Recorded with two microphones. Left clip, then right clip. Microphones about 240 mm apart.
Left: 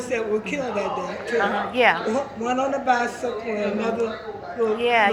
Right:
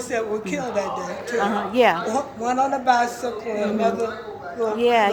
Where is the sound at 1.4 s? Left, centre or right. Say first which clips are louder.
Right 1 dB; right.